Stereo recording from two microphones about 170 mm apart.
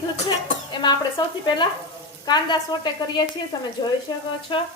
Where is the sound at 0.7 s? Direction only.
25° left (ahead or behind).